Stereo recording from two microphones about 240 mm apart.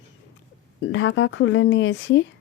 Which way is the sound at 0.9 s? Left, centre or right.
Left.